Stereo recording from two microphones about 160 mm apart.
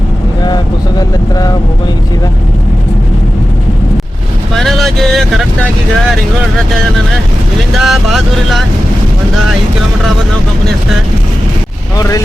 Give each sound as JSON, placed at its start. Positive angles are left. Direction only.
{"t": 0.4, "sound": "vehicle", "side_deg": 25}
{"t": 4.5, "sound": "vehicle", "side_deg": 0}
{"t": 7.7, "sound": "speech", "side_deg": 0}
{"t": 11.9, "sound": "speech", "side_deg": 20}